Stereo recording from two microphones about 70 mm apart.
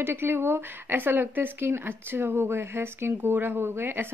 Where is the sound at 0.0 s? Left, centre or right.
Right.